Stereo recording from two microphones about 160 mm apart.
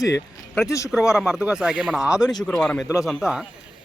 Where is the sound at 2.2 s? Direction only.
25° left (ahead or behind).